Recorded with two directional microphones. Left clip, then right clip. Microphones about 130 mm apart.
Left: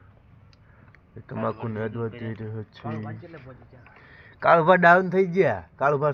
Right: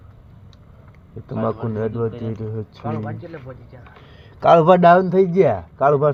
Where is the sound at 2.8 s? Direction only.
55° left (ahead or behind).